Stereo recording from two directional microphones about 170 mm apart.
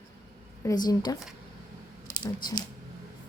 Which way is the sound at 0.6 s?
20° left (ahead or behind).